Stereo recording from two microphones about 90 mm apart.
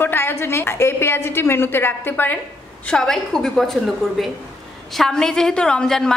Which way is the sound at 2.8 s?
10° left (ahead or behind).